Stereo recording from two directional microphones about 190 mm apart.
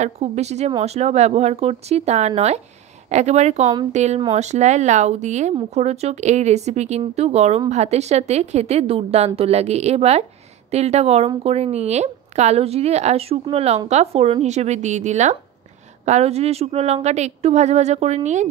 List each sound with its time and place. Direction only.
0.0 s a woman's voice: 35° right (ahead or behind)